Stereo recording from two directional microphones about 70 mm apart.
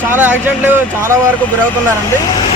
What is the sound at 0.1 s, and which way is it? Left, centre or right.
Speech, right.